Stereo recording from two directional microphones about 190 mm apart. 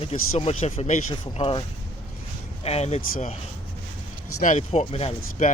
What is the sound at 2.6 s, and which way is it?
Speech, 35° left (ahead or behind).